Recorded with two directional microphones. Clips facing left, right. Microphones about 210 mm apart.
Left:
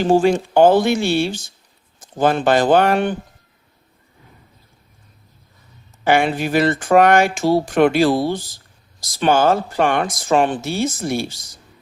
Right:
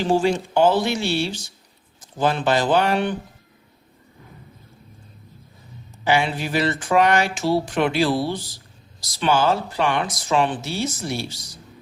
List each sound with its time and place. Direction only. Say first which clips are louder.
0.0 s speech: left 5 dB; 50° left (ahead or behind)
6.1 s speech: left 4 dB; 50° left (ahead or behind)